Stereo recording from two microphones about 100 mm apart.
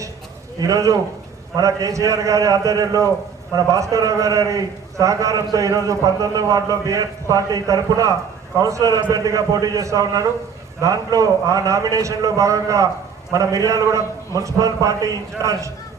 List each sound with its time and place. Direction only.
0.6 s a man's voice: 35° right (ahead or behind)